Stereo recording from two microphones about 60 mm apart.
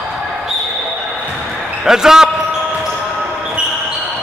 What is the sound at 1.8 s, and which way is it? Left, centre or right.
Speech, centre.